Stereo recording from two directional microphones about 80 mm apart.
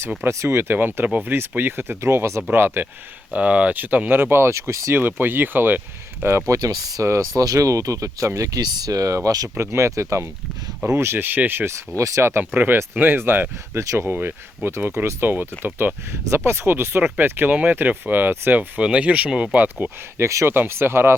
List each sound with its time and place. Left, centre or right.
0.3 s speech: right
3.3 s speech: centre; by 4.9 s right
4.9 s speech: right
6.3 s speech: right
11.9 s speech: right
13.7 s speech: right
20.2 s speech: right